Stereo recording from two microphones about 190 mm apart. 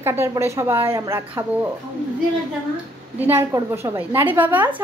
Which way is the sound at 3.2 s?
10° right (ahead or behind).